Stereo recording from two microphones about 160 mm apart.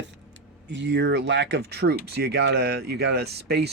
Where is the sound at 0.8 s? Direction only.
90° right.